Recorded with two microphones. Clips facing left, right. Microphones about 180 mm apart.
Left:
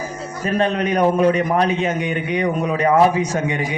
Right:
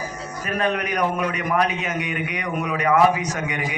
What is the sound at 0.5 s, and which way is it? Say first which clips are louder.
A man's voice: left 5 dB; 30° left (ahead or behind).